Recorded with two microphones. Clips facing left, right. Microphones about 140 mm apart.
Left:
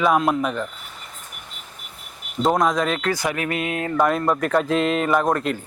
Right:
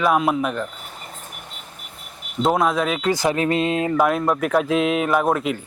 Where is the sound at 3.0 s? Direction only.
30° right (ahead or behind).